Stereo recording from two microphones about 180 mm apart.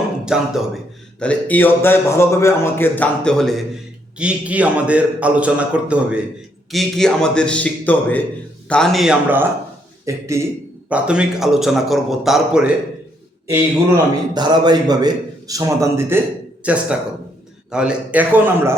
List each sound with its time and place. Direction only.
0.3 s a man's voice: 5° right (ahead or behind)
1.2 s a man's voice: 10° left (ahead or behind)
4.2 s a man's voice: 5° right (ahead or behind)
10.1 s a man's voice: 15° right (ahead or behind)
13.5 s a man's voice: 15° right (ahead or behind)